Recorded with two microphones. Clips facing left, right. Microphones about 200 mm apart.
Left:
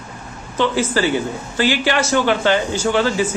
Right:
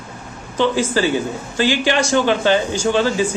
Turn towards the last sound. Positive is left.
turn(degrees=-15)  # may be behind; listen again after turning